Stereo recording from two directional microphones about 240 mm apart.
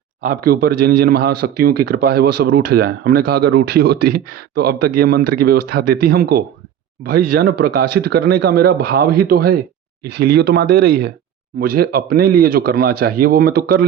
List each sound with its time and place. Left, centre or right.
0.2 s speech: right